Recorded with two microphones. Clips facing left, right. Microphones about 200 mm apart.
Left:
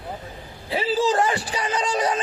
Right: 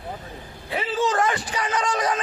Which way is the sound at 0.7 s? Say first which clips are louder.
Left 3 dB; 30° left (ahead or behind).